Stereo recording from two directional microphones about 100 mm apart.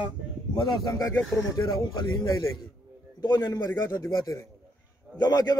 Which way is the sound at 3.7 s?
30° left (ahead or behind).